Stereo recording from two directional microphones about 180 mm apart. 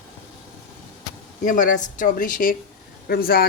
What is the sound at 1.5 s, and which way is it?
Speech, 45° left (ahead or behind).